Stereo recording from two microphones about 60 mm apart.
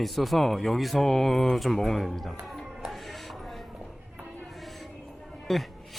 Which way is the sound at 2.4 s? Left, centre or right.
Centre.